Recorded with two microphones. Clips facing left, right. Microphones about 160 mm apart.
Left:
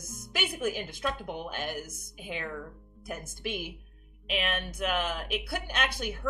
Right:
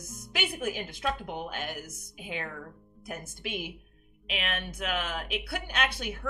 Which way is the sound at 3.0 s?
45° left (ahead or behind).